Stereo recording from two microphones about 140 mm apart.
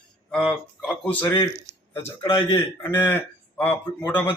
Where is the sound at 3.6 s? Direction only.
10° left (ahead or behind).